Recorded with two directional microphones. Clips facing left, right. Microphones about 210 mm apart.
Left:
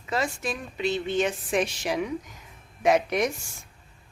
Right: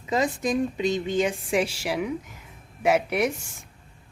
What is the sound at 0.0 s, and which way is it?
Speech, 20° right (ahead or behind).